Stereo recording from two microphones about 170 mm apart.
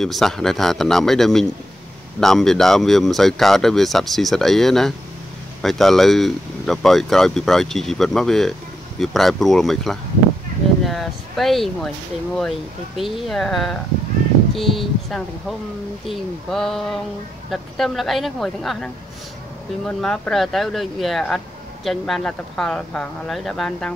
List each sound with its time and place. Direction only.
0.0 s speech: centre (ahead or behind)
19.9 s speech: 5° left (ahead or behind)